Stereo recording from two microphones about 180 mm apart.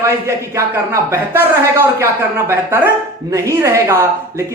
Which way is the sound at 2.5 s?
10° right (ahead or behind).